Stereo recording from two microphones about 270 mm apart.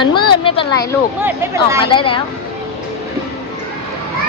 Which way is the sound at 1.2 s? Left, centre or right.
Centre.